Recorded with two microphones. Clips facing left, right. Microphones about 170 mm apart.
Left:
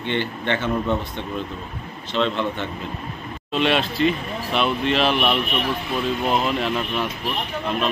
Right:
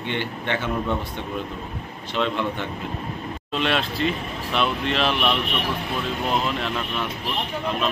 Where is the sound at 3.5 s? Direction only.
Centre (ahead or behind).